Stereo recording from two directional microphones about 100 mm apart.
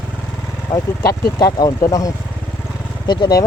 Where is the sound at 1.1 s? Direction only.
40° left (ahead or behind).